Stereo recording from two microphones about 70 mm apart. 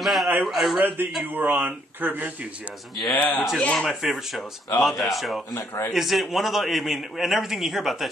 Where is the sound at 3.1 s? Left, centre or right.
Left.